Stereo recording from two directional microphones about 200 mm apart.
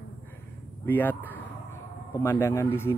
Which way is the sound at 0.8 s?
10° left (ahead or behind).